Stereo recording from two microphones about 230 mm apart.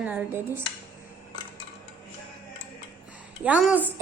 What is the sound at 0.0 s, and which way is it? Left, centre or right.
Speech, centre.